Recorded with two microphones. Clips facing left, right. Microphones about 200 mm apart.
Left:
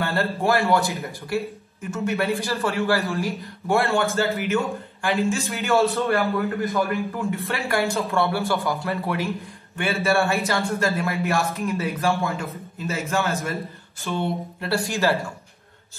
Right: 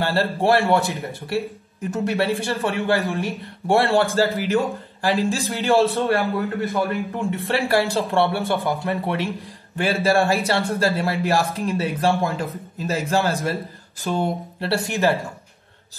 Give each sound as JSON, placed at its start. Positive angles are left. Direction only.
{"t": 0.0, "sound": "a man's voice", "side_deg": -30}
{"t": 14.0, "sound": "a sound", "side_deg": -45}
{"t": 14.6, "sound": "a man's voice", "side_deg": -30}